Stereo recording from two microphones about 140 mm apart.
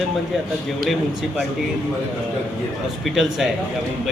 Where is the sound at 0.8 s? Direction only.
Centre (ahead or behind).